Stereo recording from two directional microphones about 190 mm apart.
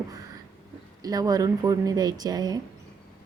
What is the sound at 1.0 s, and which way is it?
A woman's voice, 20° right (ahead or behind).